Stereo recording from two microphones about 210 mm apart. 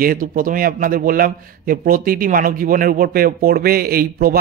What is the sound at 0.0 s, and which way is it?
A man's voice, 40° right (ahead or behind).